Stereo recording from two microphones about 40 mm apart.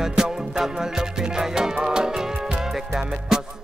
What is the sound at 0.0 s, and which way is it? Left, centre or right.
Music, centre.